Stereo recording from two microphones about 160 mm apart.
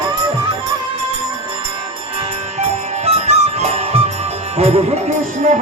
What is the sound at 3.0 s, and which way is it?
Music, 40° right (ahead or behind).